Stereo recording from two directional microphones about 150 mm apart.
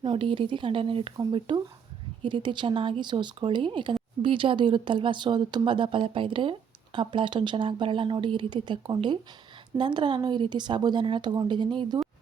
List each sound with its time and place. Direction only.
0.0 s speech: 35° right (ahead or behind)